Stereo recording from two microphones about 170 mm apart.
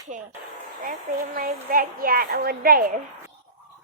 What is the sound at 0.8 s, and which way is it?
A woman's voice, 50° right (ahead or behind).